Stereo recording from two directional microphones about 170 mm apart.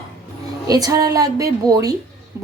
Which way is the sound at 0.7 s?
20° right (ahead or behind).